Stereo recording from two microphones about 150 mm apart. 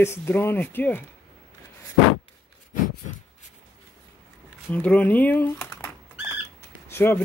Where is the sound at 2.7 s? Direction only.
60° left (ahead or behind).